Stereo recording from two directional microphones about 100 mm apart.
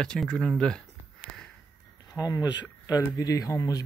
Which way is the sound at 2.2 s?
35° left (ahead or behind).